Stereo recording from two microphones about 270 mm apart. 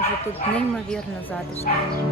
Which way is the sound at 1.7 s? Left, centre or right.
Left.